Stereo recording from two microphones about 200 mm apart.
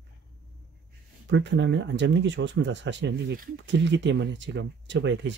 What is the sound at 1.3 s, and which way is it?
Speech, 65° right (ahead or behind).